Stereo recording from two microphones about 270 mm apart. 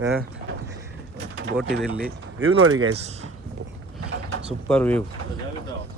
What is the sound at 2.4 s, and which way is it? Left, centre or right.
Speech, right.